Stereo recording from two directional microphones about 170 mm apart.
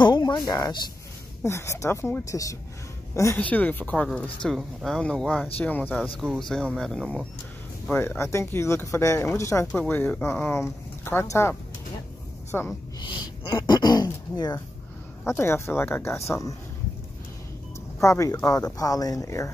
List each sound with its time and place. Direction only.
0.0 s speech: 25° left (ahead or behind); by 5.9 s 10° left (ahead or behind)
6.1 s speech: centre (ahead or behind)
7.9 s speech: 15° left (ahead or behind)
13.0 s speech: 25° left (ahead or behind)
18.0 s speech: 15° left (ahead or behind)